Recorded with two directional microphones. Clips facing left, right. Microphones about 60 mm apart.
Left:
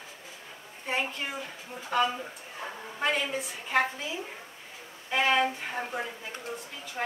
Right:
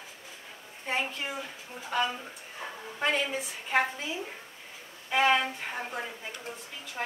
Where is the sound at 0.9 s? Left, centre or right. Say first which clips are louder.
Even; centre.